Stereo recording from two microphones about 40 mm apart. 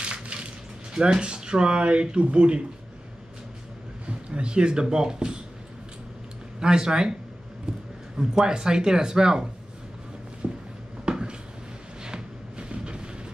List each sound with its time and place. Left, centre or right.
0.0 s crushing: right
1.0 s speech: right
4.0 s speech: right
6.6 s speech: centre
7.7 s a sound: right
8.2 s speech: centre
10.4 s a sound: right